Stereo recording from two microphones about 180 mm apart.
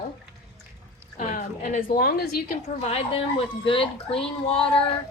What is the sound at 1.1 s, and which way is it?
A woman's voice, 45° left (ahead or behind).